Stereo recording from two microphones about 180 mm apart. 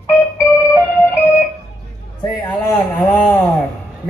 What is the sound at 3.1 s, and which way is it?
Music, 10° left (ahead or behind).